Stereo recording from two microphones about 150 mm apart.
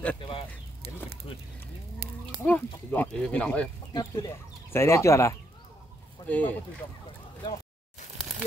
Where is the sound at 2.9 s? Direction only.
10° left (ahead or behind).